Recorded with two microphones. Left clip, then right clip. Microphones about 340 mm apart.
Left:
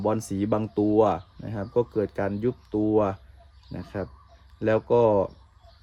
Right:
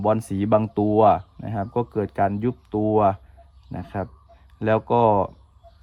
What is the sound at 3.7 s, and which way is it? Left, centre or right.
Speech, centre.